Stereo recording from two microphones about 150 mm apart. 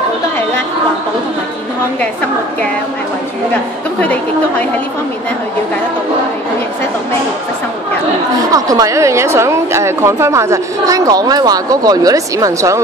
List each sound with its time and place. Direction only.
4.0 s a woman's voice: 10° left (ahead or behind)
8.5 s a woman's voice: 25° right (ahead or behind)